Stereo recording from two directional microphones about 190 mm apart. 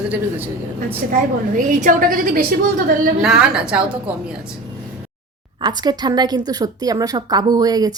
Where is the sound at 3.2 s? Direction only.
5° right (ahead or behind).